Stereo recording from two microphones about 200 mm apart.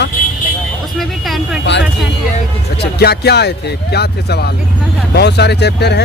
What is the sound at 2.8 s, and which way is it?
Speech, 55° left (ahead or behind).